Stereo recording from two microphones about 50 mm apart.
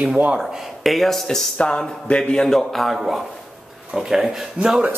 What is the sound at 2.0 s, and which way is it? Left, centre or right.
Speech, centre.